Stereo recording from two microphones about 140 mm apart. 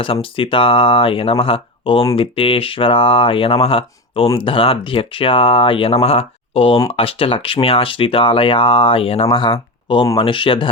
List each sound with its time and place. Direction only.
0.0 s speech: 40° left (ahead or behind)